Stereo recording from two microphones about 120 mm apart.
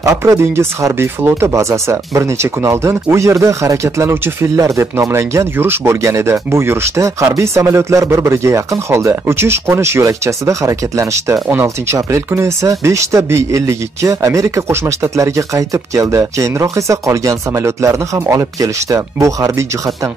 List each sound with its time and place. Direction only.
0.0 s speech: 25° right (ahead or behind)